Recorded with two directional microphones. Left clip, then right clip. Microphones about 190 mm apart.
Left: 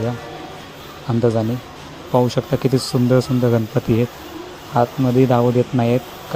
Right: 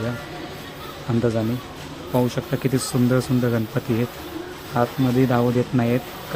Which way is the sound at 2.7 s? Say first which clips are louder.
Left 4 dB; 15° left (ahead or behind).